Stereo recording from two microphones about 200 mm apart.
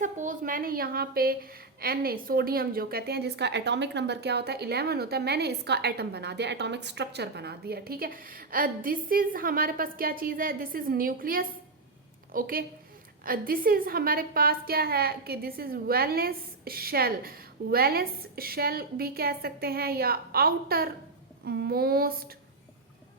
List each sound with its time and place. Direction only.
0.0 s a woman's voice: 40° right (ahead or behind)